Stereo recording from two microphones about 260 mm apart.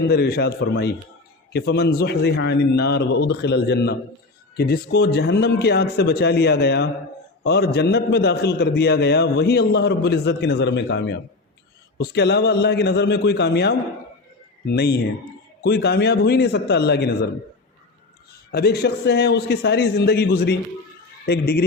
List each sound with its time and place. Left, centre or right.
0.1 s a man's voice: left
18.5 s a man's voice: left